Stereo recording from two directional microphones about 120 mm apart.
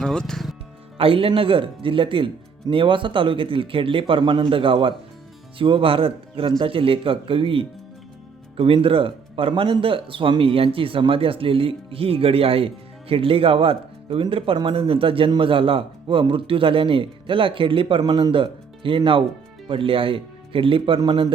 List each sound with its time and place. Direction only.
0.0 s speech: 5° left (ahead or behind)
0.9 s speech: 50° right (ahead or behind)